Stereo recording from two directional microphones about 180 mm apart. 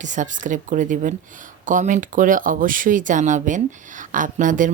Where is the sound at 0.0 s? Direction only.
45° right (ahead or behind).